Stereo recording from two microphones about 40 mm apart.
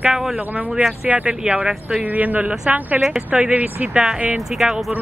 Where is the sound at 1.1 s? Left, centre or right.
Right.